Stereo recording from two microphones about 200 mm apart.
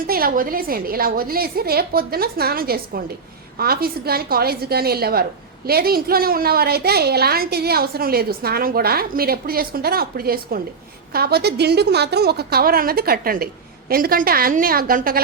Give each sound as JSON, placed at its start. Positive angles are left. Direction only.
{"t": 0.1, "sound": "a woman's voice", "side_deg": -45}